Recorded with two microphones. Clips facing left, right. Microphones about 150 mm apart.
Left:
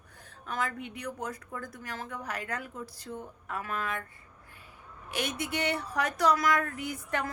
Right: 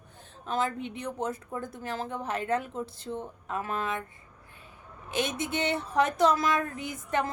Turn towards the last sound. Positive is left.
turn(degrees=-20)  # may be behind; listen again after turning